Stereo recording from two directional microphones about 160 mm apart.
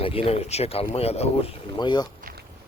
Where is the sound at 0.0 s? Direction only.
35° left (ahead or behind).